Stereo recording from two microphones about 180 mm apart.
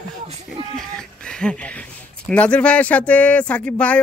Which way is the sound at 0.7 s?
5° left (ahead or behind).